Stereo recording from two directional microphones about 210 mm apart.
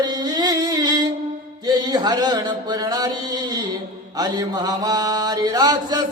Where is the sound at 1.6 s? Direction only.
20° right (ahead or behind).